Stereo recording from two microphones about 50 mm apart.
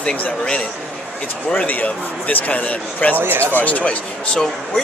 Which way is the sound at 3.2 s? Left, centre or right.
Right.